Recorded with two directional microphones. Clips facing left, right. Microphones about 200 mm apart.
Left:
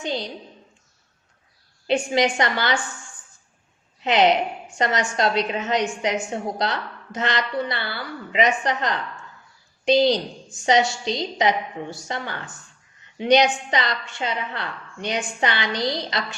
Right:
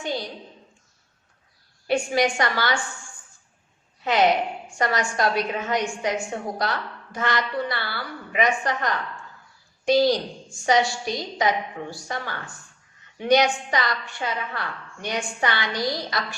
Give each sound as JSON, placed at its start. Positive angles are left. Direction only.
{"t": 0.0, "sound": "a woman's voice", "side_deg": 20}
{"t": 1.9, "sound": "a woman's voice", "side_deg": 20}
{"t": 4.0, "sound": "a woman's voice", "side_deg": 20}